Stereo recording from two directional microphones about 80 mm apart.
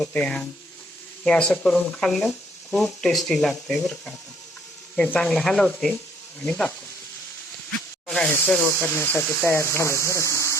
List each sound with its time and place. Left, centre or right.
0.0 s speech: centre
4.9 s speech: centre
7.7 s snake: centre
9.0 s speech: left